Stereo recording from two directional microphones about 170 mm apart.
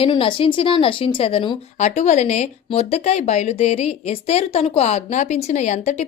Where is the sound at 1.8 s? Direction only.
40° left (ahead or behind).